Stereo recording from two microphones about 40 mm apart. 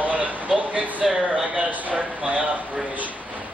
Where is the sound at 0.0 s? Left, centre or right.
Right.